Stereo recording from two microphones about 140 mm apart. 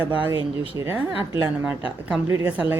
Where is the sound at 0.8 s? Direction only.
15° right (ahead or behind).